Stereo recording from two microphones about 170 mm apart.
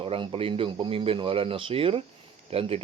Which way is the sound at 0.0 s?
30° right (ahead or behind).